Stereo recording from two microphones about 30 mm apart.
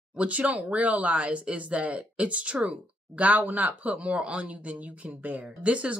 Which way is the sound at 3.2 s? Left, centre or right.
Right.